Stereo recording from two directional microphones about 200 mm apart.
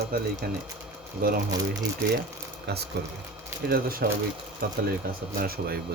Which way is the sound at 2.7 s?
55° right (ahead or behind).